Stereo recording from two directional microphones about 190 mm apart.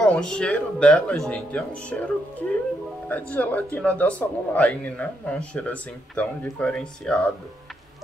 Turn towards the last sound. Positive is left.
turn(degrees=5)  # may be behind; listen again after turning